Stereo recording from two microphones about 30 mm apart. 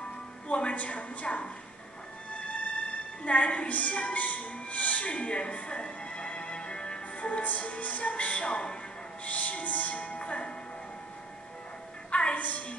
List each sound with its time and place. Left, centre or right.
0.5 s music: left
0.7 s music: left
3.3 s a woman's voice: left
3.7 s speech: left
7.2 s music: left
7.4 s music: left
9.2 s music: left
12.1 s music: left
12.4 s music: left